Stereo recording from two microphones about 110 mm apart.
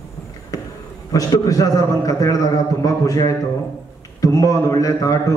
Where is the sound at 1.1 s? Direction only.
30° left (ahead or behind).